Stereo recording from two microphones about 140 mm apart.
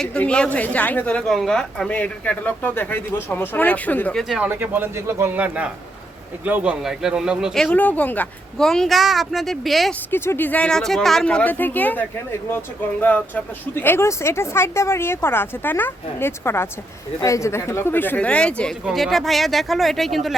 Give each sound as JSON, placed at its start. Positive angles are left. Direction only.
{"t": 0.0, "sound": "a woman's voice", "side_deg": 5}
{"t": 4.4, "sound": "a man's voice", "side_deg": -15}
{"t": 10.1, "sound": "a woman's voice", "side_deg": 15}